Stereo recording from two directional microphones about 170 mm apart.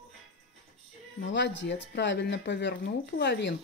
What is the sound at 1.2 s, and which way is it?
Speech, 90° left.